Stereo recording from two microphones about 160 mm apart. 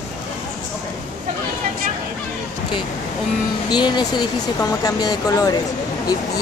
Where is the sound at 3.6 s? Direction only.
25° left (ahead or behind).